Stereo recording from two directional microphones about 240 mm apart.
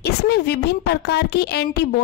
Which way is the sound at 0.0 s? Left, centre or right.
Left.